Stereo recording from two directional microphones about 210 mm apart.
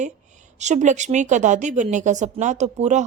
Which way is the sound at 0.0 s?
35° right (ahead or behind).